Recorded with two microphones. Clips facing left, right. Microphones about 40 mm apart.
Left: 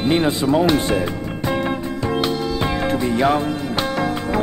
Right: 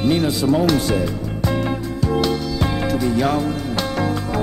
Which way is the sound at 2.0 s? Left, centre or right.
Left.